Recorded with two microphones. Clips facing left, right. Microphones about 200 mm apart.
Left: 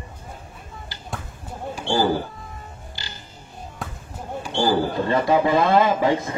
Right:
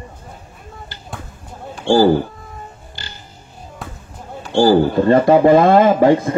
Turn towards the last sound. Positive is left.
turn(degrees=-50)  # may be behind; listen again after turning